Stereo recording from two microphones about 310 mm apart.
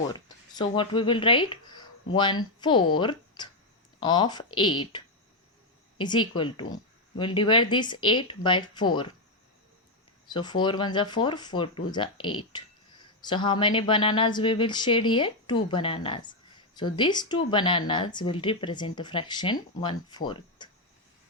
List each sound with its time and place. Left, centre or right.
0.1 s a woman's voice: centre
6.3 s a woman's voice: centre
10.3 s a woman's voice: centre